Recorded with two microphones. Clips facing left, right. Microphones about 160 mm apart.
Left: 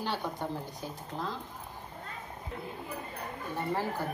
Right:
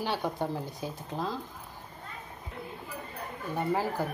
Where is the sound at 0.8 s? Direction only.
15° right (ahead or behind).